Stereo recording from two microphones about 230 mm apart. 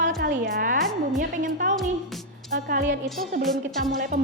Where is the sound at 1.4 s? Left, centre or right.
Right.